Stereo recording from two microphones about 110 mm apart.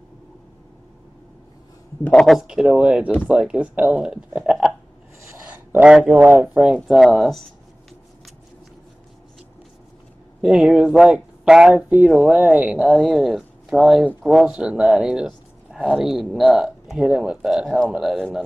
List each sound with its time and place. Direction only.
2.0 s speech: 5° left (ahead or behind)
5.2 s a sound: 15° right (ahead or behind)
5.9 s speech: 5° right (ahead or behind)
6.9 s speech: 5° right (ahead or behind)
10.4 s speech: 5° right (ahead or behind)